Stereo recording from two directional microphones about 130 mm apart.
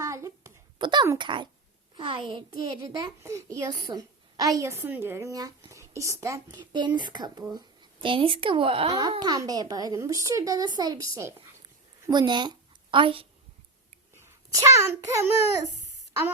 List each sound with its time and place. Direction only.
0.0 s a sound: 25° right (ahead or behind)
0.8 s a child's voice: 35° right (ahead or behind)
3.2 s a woman's voice: 25° right (ahead or behind); by 8.9 s 45° right (ahead or behind)
8.9 s a child's voice: 30° right (ahead or behind)
12.1 s speech: 35° right (ahead or behind)
14.3 s a child's voice: 20° right (ahead or behind)